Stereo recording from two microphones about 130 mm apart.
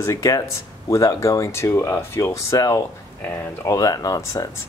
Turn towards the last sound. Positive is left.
turn(degrees=25)  # may be behind; listen again after turning